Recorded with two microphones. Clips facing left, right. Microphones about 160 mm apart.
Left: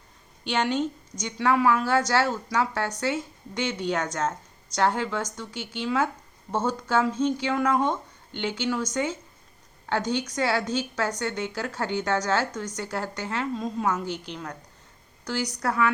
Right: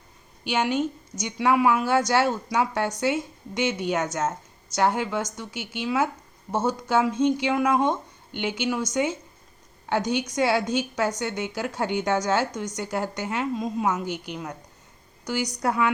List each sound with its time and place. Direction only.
0.4 s a woman's voice: 5° right (ahead or behind)